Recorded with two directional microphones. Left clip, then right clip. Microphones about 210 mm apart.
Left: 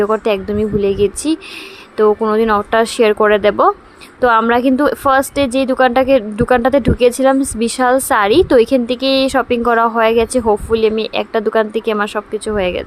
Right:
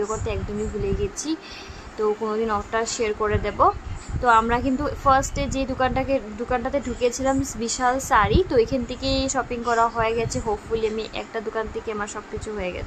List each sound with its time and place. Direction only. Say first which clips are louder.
0.0 s a woman's voice: left 13 dB; 35° left (ahead or behind)